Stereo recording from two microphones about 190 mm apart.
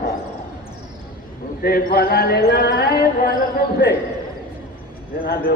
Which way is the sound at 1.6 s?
50° left (ahead or behind).